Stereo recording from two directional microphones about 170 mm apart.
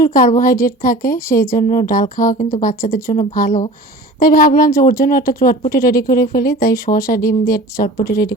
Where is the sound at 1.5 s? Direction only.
50° left (ahead or behind).